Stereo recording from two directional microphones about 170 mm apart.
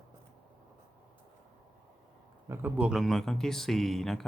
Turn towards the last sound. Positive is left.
turn(degrees=0)  # may be behind; listen again after turning